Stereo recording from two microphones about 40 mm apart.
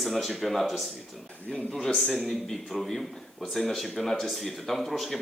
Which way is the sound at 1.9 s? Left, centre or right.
Centre.